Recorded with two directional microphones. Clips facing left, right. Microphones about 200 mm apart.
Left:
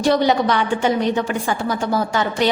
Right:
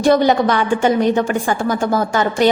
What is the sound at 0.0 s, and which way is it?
A woman's voice, 50° right (ahead or behind).